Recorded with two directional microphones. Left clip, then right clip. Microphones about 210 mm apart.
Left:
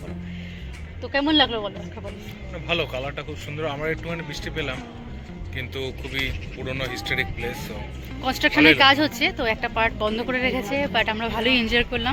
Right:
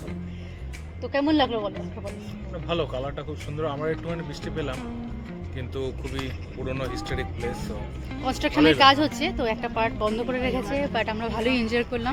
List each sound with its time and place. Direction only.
1.0 s speech: centre (ahead or behind)
2.6 s speech: 10° right (ahead or behind)
8.2 s a woman's voice: 10° left (ahead or behind)